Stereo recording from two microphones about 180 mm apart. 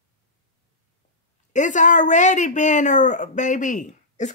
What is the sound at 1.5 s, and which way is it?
Speech, 45° left (ahead or behind).